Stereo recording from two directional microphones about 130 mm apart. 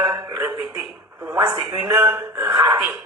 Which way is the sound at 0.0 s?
35° right (ahead or behind).